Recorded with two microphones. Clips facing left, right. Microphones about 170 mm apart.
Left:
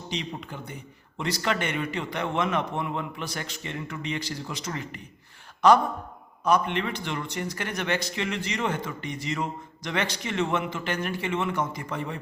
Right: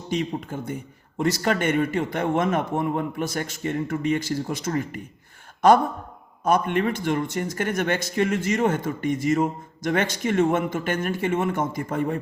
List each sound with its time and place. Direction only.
0.1 s a man's voice: 45° right (ahead or behind)
6.4 s a man's voice: 50° right (ahead or behind)